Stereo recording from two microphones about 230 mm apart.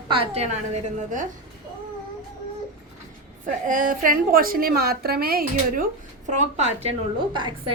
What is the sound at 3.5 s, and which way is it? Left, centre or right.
A woman's voice, right.